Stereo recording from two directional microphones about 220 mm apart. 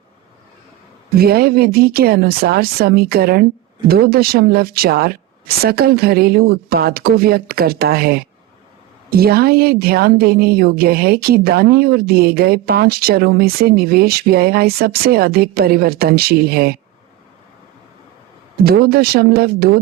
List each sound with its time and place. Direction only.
1.1 s a woman's voice: 45° right (ahead or behind)
18.6 s a woman's voice: 45° right (ahead or behind)